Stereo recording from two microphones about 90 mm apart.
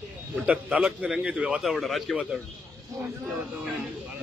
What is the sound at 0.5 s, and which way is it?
A man's voice, 15° right (ahead or behind).